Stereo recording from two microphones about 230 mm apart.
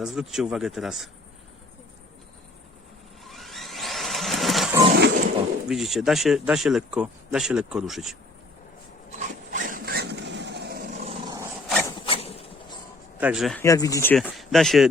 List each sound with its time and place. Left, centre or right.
0.0 s speech: centre
3.2 s a sound: centre
4.9 s wild animals: right
5.6 s speech: centre
9.1 s a sound: right
11.7 s rub: centre
11.9 s a sound: left
13.1 s speech: centre
13.7 s speech: centre